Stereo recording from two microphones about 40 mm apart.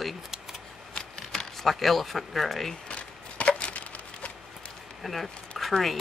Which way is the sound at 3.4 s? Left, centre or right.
Left.